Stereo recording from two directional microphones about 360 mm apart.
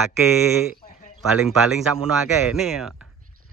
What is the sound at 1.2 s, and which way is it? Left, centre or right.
Speech, centre.